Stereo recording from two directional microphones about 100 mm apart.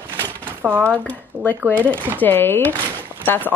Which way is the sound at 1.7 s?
15° left (ahead or behind).